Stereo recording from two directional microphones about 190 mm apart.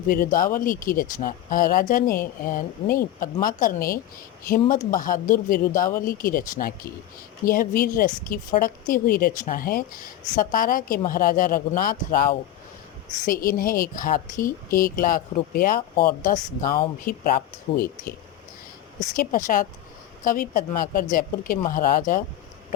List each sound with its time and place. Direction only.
0.1 s speech: 50° left (ahead or behind)
17.1 s speech: 50° left (ahead or behind)
19.1 s speech: 45° left (ahead or behind)